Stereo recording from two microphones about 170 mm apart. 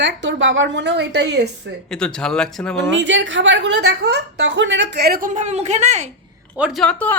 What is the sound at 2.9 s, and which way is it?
A woman's voice, 90° right.